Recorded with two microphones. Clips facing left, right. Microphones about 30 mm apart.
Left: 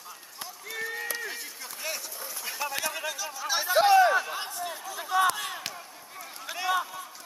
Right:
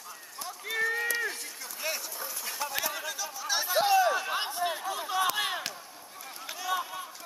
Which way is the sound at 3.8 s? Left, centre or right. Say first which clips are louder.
Left 5 dB; left.